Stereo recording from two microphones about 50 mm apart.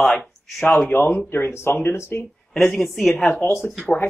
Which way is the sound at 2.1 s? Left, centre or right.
Left.